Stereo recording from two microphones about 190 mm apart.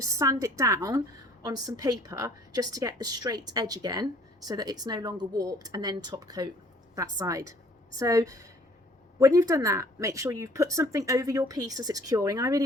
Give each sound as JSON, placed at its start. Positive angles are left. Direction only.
{"t": 0.0, "sound": "a woman's voice", "side_deg": -15}